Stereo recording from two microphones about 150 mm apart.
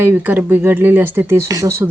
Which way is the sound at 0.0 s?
15° right (ahead or behind).